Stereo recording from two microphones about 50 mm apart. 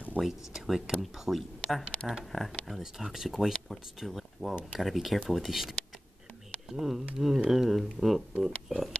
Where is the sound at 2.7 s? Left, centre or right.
Centre.